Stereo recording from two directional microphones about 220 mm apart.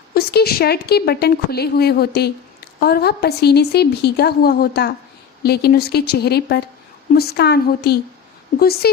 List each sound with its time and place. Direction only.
0.1 s a woman's voice: 45° left (ahead or behind)